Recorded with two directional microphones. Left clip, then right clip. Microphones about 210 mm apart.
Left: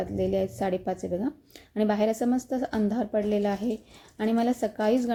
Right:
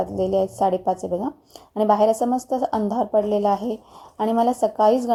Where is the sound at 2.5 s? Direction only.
40° right (ahead or behind).